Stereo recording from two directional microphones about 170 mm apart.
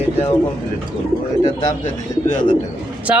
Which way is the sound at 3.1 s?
5° right (ahead or behind).